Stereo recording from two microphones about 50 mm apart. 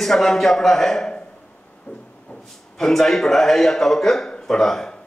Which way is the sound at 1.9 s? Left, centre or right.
Left.